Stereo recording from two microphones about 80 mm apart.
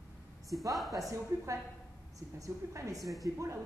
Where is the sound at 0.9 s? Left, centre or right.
Right.